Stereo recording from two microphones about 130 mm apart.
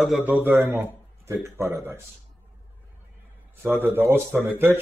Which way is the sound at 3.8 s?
20° right (ahead or behind).